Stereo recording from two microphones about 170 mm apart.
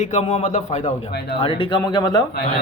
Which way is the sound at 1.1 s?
75° left (ahead or behind).